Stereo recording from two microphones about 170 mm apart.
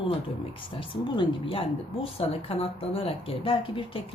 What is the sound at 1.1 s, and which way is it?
A woman's voice, 35° left (ahead or behind).